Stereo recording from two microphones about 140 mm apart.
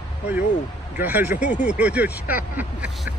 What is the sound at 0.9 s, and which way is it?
Speech, 15° right (ahead or behind).